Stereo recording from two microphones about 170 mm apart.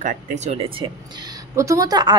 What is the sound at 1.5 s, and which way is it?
Speech, 20° right (ahead or behind).